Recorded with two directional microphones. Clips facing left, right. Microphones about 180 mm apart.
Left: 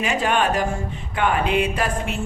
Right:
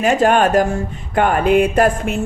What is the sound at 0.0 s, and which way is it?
Speech, 45° right (ahead or behind).